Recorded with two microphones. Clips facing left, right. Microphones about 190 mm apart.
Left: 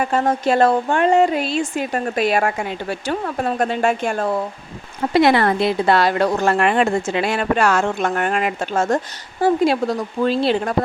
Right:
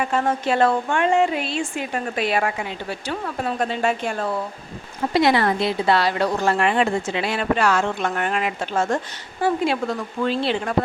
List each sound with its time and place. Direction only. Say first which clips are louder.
0.0 s speech: left 3 dB; 40° left (ahead or behind)